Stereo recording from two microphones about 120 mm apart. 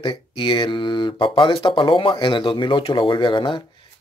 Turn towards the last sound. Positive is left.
turn(degrees=45)  # may be behind; listen again after turning